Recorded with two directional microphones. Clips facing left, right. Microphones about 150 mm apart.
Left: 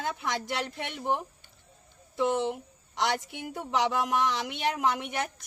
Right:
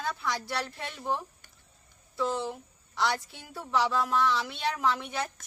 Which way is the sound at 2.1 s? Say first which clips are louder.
Left 4 dB; 20° left (ahead or behind).